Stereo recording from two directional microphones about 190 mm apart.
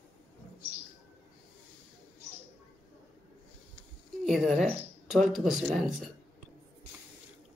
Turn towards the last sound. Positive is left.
turn(degrees=0)  # may be behind; listen again after turning